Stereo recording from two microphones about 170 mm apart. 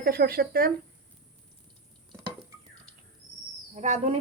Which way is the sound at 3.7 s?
40° right (ahead or behind).